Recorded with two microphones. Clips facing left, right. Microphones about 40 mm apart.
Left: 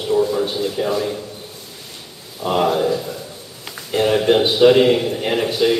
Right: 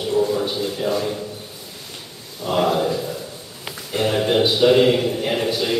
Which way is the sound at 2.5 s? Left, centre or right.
Centre.